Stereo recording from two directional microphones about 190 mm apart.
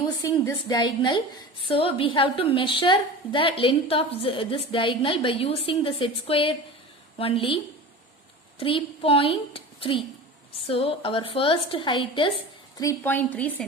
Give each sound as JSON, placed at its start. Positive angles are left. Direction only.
{"t": 0.2, "sound": "a woman's voice", "side_deg": 15}
{"t": 12.8, "sound": "a woman's voice", "side_deg": 15}